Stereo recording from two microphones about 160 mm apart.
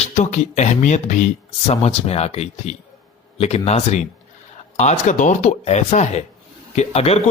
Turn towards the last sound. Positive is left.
turn(degrees=40)  # may be behind; listen again after turning